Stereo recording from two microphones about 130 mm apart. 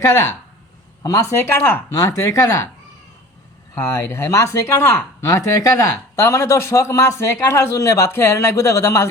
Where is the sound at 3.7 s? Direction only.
20° left (ahead or behind).